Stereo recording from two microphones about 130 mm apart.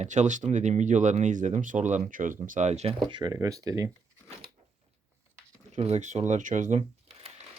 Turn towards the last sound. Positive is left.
turn(degrees=-60)  # may be behind; listen again after turning